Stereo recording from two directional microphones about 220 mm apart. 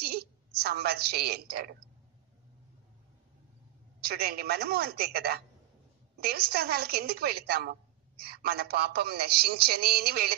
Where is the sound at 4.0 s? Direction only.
45° right (ahead or behind).